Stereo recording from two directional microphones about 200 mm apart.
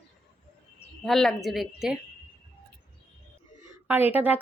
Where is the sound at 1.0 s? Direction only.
Centre (ahead or behind).